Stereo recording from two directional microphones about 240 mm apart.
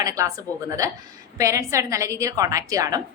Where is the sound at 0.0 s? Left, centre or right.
Centre.